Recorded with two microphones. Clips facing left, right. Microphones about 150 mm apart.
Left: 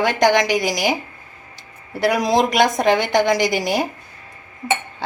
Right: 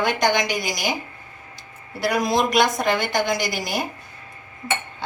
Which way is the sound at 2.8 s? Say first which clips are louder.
Left 5 dB; 80° left.